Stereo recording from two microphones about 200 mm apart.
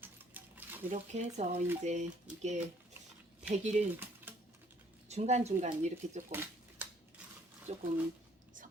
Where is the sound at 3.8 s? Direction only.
40° right (ahead or behind).